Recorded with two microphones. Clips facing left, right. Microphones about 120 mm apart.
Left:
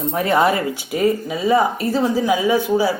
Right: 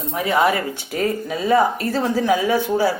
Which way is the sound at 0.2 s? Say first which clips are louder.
Left 1 dB; 35° left (ahead or behind).